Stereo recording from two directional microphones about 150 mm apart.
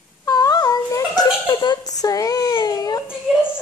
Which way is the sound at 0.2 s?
25° left (ahead or behind).